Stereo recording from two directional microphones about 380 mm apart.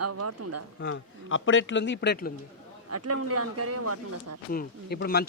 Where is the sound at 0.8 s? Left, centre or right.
Left.